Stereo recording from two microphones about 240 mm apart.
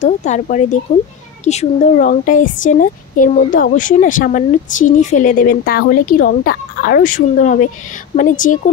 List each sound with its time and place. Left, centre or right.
0.0 s speech: left